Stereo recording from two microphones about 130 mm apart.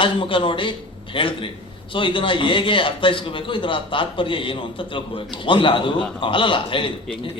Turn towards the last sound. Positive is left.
turn(degrees=40)  # may be behind; listen again after turning